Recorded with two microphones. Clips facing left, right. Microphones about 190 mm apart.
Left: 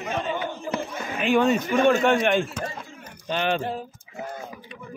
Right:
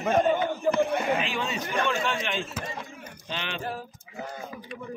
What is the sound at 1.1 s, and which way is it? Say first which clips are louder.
A man's voice: left 9 dB; 55° left (ahead or behind).